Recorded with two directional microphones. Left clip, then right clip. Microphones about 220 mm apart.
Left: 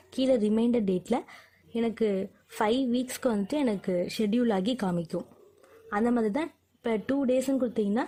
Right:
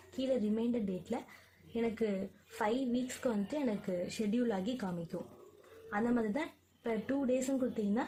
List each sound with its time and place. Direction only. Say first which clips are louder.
0.2 s a woman's voice: left 9 dB; 45° left (ahead or behind)